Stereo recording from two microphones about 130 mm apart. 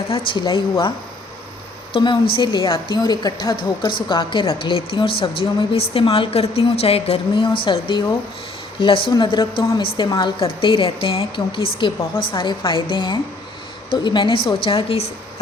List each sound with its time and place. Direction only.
0.1 s a woman's voice: 40° left (ahead or behind)